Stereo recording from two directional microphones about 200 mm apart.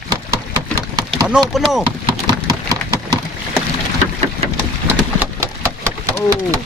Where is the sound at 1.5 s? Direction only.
Centre (ahead or behind).